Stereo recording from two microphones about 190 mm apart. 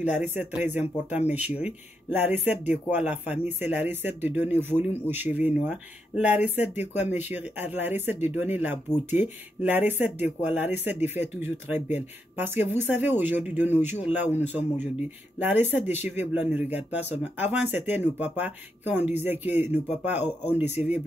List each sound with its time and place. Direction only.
0.3 s speech: 10° right (ahead or behind)